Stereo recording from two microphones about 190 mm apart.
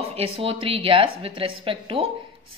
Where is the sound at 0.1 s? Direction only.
30° right (ahead or behind).